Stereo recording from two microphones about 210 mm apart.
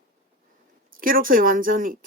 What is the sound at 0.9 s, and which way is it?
Speech, 40° right (ahead or behind).